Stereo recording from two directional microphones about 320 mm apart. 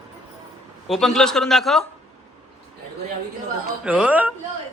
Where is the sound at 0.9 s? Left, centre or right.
Centre.